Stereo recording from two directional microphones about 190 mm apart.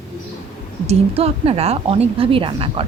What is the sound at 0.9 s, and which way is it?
A woman's voice, 30° right (ahead or behind).